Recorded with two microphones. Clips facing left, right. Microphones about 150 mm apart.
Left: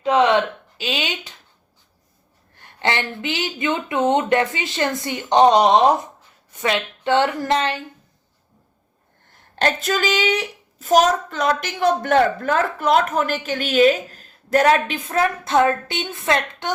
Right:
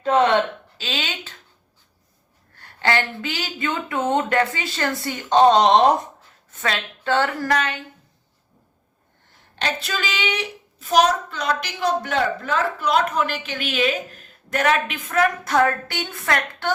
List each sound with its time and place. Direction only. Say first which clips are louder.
0.8 s speech: left 4 dB; 15° left (ahead or behind)
2.6 s speech: right 1 dB; 20° left (ahead or behind)
9.6 s a woman's voice: left 6 dB; 50° left (ahead or behind); by 16.7 s 20° left (ahead or behind)